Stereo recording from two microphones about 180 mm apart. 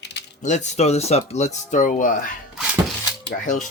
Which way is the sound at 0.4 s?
40° left (ahead or behind).